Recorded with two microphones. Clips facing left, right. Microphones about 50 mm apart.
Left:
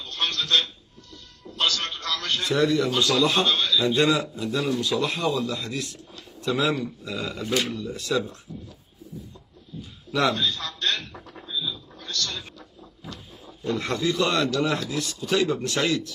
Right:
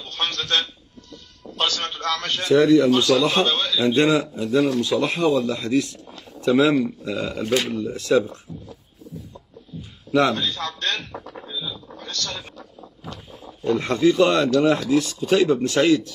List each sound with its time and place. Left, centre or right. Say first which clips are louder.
0.0 s a man's voice: right 1 dB; right
4.5 s speech: right 7 dB; centre
4.8 s speech: right 5 dB; right
6.5 s a man's voice: right 7 dB; right
6.8 s a man's voice: right 6 dB; right
9.8 s speech: right 6 dB; right
11.5 s a sound: left 2 dB; right
13.7 s a man's voice: right 7 dB; right